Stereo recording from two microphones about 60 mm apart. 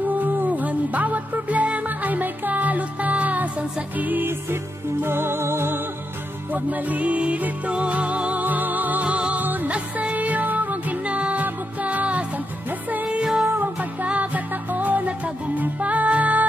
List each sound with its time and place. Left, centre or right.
0.2 s music: right
6.5 s music: right
13.2 s music: centre
13.7 s music: right